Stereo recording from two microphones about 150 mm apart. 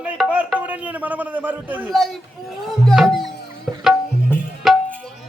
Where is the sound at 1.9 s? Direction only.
Centre (ahead or behind).